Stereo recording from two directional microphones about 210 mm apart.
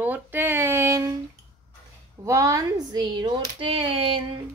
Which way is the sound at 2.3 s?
15° right (ahead or behind).